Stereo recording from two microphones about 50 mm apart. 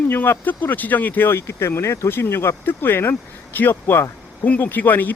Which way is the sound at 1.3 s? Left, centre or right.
Left.